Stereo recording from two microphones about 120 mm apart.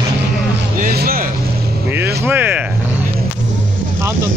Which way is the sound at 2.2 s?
15° right (ahead or behind).